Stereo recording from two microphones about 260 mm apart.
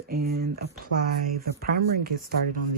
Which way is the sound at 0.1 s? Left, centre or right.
Right.